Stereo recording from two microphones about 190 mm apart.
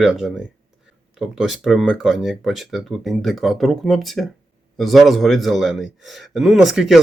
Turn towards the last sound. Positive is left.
turn(degrees=0)  # may be behind; listen again after turning